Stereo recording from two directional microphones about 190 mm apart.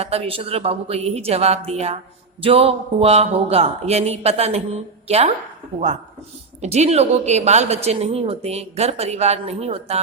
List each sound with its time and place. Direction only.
0.0 s speech: 30° right (ahead or behind)
6.6 s speech: 35° right (ahead or behind)